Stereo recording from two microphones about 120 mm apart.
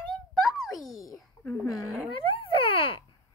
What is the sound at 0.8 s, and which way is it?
Speech, 30° left (ahead or behind).